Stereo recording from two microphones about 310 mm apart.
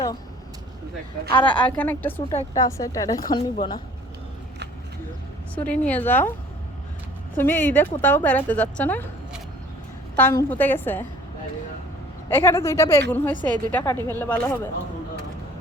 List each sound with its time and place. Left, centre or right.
1.3 s a woman's voice: centre
1.5 s speech: centre
2.3 s a woman's voice: centre
5.5 s speech: centre
7.3 s a woman's voice: centre
12.3 s a woman's voice: centre